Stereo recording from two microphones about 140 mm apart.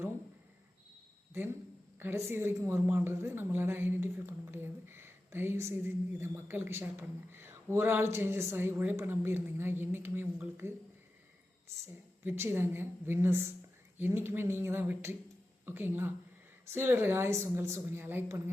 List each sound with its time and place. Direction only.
1.3 s a man's voice: 20° right (ahead or behind)
12.2 s a man's voice: 15° right (ahead or behind)